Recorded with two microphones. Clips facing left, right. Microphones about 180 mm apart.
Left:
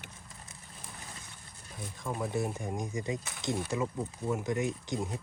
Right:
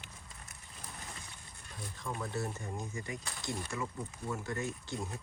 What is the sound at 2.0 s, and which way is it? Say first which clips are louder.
Speech: left 5 dB; 15° left (ahead or behind).